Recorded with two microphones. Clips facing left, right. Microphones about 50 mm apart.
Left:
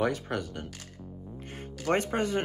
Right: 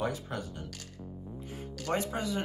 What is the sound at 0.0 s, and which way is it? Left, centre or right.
Speech, left.